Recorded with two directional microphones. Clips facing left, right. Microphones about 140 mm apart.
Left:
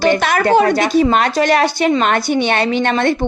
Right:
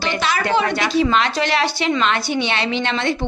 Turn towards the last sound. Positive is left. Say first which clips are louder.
# left 6 dB
turn(degrees=50)  # may be behind; listen again after turning